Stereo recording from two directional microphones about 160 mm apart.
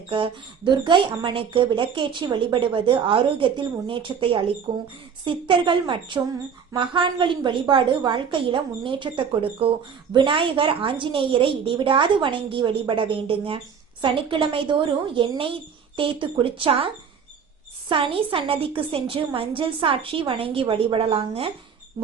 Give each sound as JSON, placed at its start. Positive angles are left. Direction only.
{"t": 0.1, "sound": "speech", "side_deg": -30}